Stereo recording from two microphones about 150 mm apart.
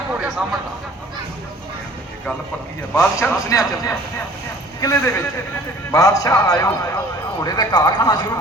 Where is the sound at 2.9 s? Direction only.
10° left (ahead or behind).